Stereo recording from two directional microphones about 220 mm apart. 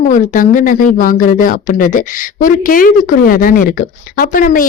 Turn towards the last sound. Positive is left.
turn(degrees=35)  # may be behind; listen again after turning